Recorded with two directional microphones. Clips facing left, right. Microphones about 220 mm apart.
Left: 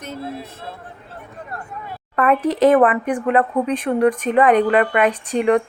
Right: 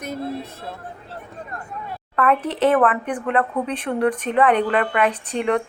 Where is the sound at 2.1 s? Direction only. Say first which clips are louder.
Left 3 dB; 10° left (ahead or behind).